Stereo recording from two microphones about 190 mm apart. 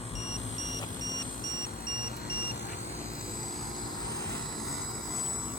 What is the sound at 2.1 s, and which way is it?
Vehicle, 60° left (ahead or behind).